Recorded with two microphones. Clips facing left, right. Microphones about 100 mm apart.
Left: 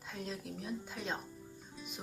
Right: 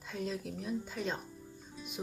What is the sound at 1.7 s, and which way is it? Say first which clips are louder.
Music: right 2 dB; centre (ahead or behind).